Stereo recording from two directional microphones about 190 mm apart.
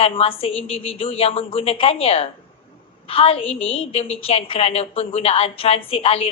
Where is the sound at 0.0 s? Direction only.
30° left (ahead or behind).